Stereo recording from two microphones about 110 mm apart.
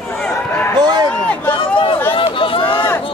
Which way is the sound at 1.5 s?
50° left (ahead or behind).